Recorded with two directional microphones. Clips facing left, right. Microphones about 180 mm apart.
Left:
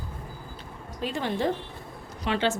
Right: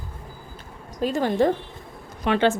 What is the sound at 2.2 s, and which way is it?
Speech, 55° right (ahead or behind).